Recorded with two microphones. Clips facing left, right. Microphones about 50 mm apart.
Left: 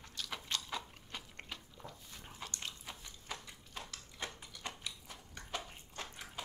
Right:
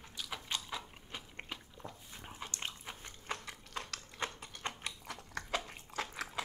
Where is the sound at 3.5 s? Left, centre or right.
Right.